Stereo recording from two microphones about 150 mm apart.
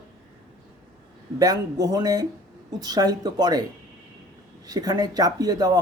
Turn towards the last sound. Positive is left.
turn(degrees=-25)  # may be behind; listen again after turning